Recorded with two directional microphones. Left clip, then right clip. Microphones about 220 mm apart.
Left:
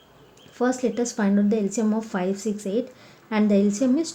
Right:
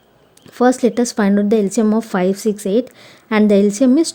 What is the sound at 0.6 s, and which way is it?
A woman's voice, 50° right (ahead or behind).